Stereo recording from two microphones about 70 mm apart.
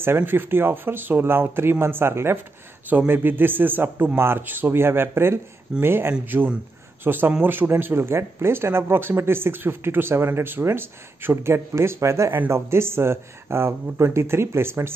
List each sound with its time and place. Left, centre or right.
0.0 s speech: right